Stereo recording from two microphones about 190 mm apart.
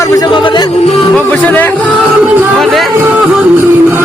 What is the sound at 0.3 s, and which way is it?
Speech, 25° left (ahead or behind).